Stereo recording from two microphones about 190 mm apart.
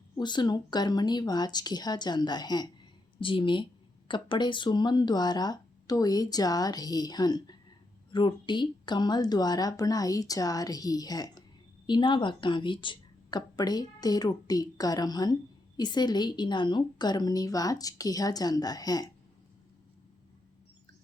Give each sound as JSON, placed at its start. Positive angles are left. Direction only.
{"t": 0.2, "sound": "speech", "side_deg": 25}